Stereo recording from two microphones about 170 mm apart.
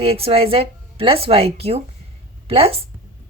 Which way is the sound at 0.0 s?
35° right (ahead or behind).